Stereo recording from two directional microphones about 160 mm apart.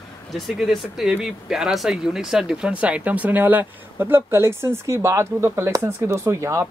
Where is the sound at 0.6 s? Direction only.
Centre (ahead or behind).